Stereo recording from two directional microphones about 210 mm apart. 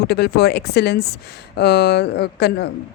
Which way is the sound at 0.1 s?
50° left (ahead or behind).